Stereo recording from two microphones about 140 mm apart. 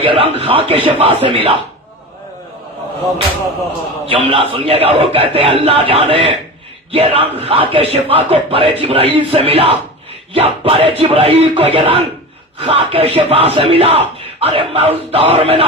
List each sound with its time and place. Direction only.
0.0 s speech: 40° right (ahead or behind)
4.0 s speech: 40° right (ahead or behind)